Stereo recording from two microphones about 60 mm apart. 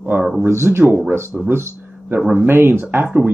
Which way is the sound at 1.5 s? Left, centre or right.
Right.